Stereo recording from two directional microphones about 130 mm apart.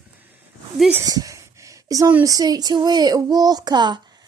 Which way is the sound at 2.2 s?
30° right (ahead or behind).